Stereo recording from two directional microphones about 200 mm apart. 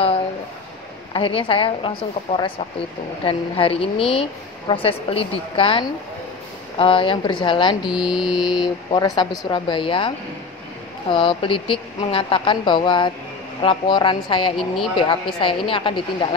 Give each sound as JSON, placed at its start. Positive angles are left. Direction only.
{"t": 1.1, "sound": "a woman's voice", "side_deg": 25}
{"t": 3.3, "sound": "a woman's voice", "side_deg": 25}
{"t": 7.9, "sound": "mantra", "side_deg": -5}
{"t": 8.4, "sound": "a woman's voice", "side_deg": 20}